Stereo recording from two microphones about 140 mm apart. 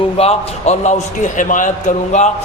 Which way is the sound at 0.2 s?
50° left (ahead or behind).